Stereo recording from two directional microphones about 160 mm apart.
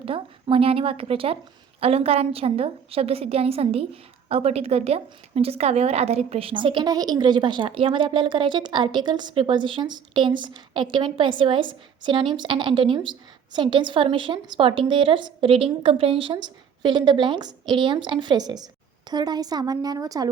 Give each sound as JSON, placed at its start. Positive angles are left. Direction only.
{"t": 0.0, "sound": "speech", "side_deg": -35}